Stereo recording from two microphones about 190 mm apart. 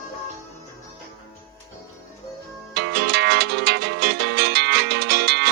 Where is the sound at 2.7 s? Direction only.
60° right (ahead or behind).